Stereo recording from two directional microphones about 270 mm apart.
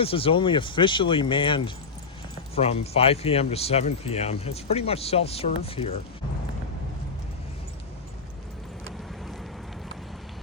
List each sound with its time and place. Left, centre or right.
0.0 s speech: left